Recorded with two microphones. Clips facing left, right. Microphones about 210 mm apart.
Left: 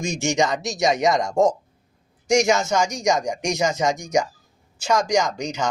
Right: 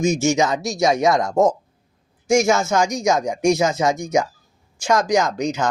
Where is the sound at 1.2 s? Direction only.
5° right (ahead or behind).